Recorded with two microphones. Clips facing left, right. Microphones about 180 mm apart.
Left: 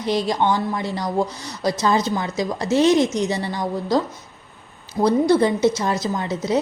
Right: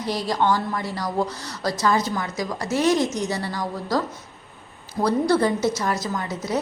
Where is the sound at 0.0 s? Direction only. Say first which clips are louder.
Left 3 dB; 20° left (ahead or behind).